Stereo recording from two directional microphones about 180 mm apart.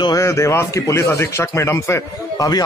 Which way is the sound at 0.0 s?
20° left (ahead or behind).